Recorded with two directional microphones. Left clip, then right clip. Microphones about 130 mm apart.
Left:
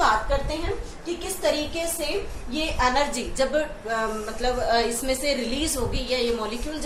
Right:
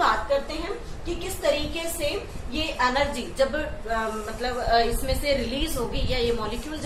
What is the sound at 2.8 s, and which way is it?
A woman's voice, 30° left (ahead or behind).